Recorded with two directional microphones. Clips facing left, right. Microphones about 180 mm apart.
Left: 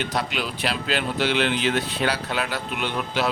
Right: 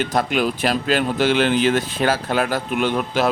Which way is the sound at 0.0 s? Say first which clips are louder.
Right 7 dB; 50° right (ahead or behind).